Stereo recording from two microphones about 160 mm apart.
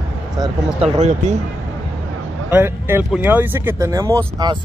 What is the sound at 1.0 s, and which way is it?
Speech, 45° right (ahead or behind).